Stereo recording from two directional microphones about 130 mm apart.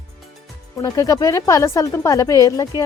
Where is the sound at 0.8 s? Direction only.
30° left (ahead or behind).